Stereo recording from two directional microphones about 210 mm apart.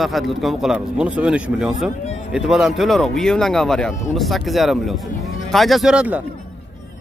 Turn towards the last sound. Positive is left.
turn(degrees=-5)  # may be behind; listen again after turning